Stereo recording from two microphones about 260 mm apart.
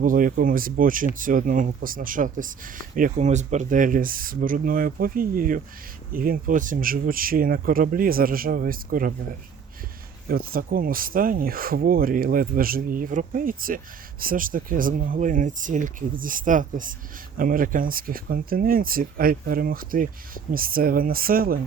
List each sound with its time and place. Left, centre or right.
0.0 s speech: right
10.2 s speech: right